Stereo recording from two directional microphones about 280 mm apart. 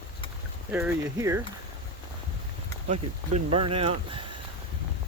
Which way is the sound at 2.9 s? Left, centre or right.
Right.